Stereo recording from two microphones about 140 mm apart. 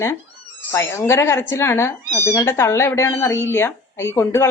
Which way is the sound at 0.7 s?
20° left (ahead or behind).